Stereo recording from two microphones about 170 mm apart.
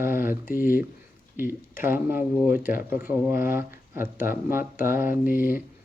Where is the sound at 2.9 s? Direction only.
10° right (ahead or behind).